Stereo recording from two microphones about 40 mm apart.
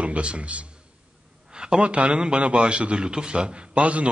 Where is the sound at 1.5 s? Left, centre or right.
Right.